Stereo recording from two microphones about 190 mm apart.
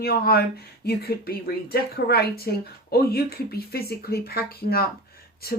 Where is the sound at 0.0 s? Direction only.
55° left (ahead or behind).